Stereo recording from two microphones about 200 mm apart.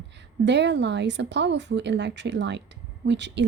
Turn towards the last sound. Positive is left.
turn(degrees=-60)  # may be behind; listen again after turning